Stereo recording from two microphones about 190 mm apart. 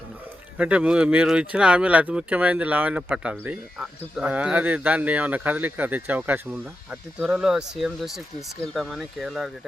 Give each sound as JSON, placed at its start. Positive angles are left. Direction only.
{"t": 0.5, "sound": "speech", "side_deg": -5}